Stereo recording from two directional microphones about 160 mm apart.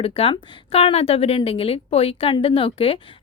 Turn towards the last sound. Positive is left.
turn(degrees=35)  # may be behind; listen again after turning